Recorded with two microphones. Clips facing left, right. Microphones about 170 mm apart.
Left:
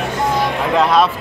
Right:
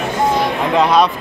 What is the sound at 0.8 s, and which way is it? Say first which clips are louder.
Speech: right 1 dB; centre (ahead or behind).